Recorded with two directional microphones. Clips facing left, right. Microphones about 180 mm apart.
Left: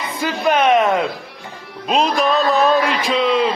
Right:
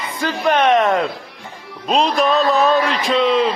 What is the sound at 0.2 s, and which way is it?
A man's voice, 5° left (ahead or behind).